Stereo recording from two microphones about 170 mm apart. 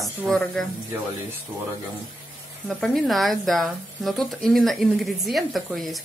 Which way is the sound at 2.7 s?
Centre (ahead or behind).